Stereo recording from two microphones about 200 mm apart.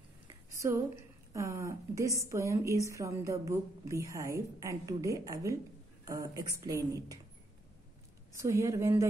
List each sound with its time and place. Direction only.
0.5 s a woman's voice: 15° right (ahead or behind)
8.4 s a woman's voice: 15° right (ahead or behind)